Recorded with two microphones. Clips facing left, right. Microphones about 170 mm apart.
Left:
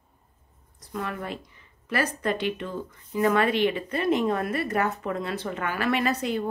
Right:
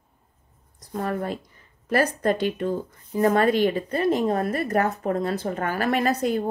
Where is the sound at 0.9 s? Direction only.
40° right (ahead or behind).